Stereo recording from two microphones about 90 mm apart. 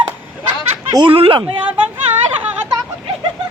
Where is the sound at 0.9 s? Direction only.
80° right.